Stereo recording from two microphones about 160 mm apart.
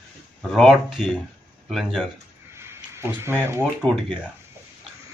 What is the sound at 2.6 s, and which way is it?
Speech, 15° right (ahead or behind).